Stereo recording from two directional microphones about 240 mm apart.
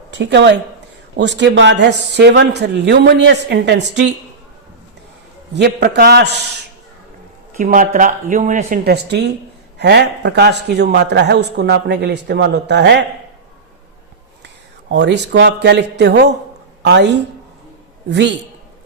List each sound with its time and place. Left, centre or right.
0.1 s a man's voice: right
5.5 s a man's voice: right
7.5 s a man's voice: right
14.4 s a woman's voice: right
18.1 s a man's voice: right